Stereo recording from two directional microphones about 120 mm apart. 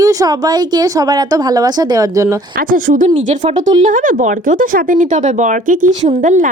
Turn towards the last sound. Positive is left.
turn(degrees=-90)